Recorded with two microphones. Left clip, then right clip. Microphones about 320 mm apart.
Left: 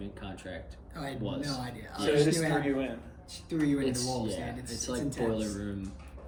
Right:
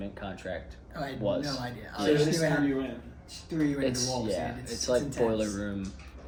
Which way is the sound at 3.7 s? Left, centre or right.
Centre.